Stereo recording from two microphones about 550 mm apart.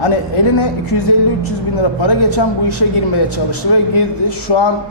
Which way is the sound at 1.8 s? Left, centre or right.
Left.